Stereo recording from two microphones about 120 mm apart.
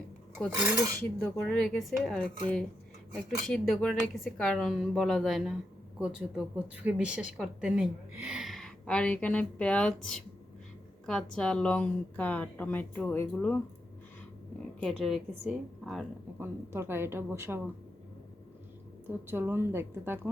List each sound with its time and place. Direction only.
0.5 s speech: 15° right (ahead or behind)
1.2 s a woman's voice: 5° left (ahead or behind)
14.8 s speech: centre (ahead or behind)
16.4 s a woman's voice: 20° right (ahead or behind)
19.0 s a woman's voice: 20° right (ahead or behind)